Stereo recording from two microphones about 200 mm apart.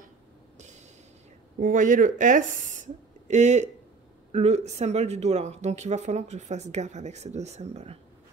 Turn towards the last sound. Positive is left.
turn(degrees=-35)  # may be behind; listen again after turning